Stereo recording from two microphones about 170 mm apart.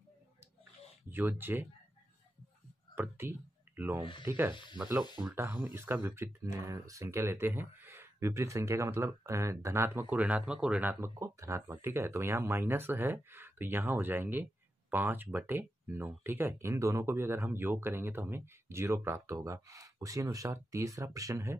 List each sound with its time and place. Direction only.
1.1 s speech: 10° right (ahead or behind)
3.0 s speech: 15° right (ahead or behind)
4.0 s speech: 30° left (ahead or behind)
4.3 s speech: 10° right (ahead or behind)
4.8 s speech: centre (ahead or behind)
5.2 s speech: 15° right (ahead or behind)